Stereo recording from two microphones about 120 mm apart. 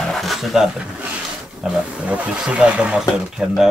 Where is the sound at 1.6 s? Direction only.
10° right (ahead or behind).